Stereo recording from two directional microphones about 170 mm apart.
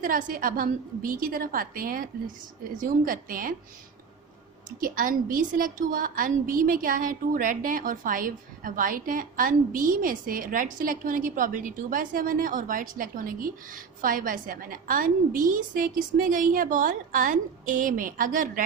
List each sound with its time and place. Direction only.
0.0 s a woman's voice: 50° right (ahead or behind)
4.8 s a woman's voice: 55° right (ahead or behind)